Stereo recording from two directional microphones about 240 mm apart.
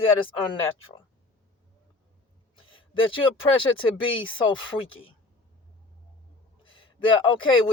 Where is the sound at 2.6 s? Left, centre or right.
Left.